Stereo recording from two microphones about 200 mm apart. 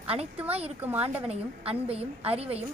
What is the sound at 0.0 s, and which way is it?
A woman's voice, 30° right (ahead or behind).